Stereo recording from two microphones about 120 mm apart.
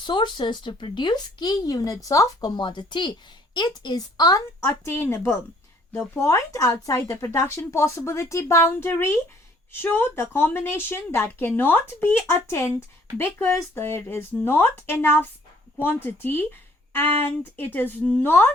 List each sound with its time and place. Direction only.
0.0 s speech: 40° left (ahead or behind)
4.9 s speech: 20° left (ahead or behind)